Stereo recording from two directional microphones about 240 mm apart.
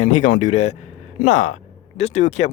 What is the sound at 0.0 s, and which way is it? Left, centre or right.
Speech, left.